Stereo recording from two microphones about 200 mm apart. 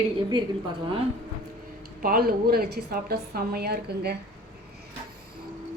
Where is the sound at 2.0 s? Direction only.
45° right (ahead or behind).